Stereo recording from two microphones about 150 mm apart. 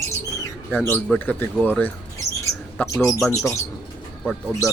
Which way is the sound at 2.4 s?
20° left (ahead or behind).